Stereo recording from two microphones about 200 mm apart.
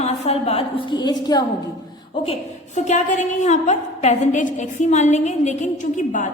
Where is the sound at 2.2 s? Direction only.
35° left (ahead or behind).